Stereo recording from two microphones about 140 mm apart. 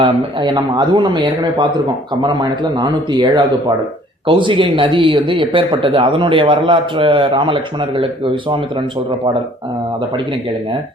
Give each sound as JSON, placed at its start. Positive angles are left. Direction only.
{"t": 0.0, "sound": "speech", "side_deg": -35}